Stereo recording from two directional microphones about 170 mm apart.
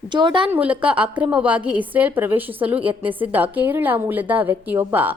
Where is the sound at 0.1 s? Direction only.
25° right (ahead or behind).